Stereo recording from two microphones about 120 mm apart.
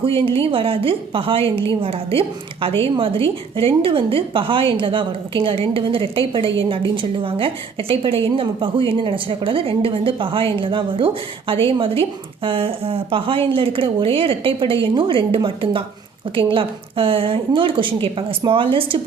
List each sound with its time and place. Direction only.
0.0 s a woman's voice: 50° right (ahead or behind)